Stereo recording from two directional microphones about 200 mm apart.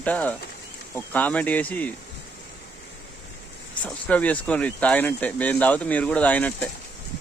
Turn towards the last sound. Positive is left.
turn(degrees=10)  # may be behind; listen again after turning